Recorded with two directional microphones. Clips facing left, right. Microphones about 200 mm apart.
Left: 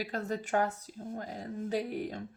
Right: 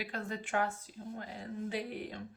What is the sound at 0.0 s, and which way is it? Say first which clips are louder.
Speech: left 5 dB; 40° left (ahead or behind).